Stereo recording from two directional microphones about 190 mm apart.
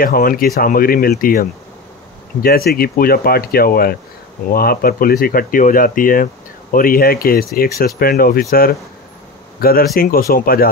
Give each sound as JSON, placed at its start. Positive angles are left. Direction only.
{"t": 0.0, "sound": "speech", "side_deg": 50}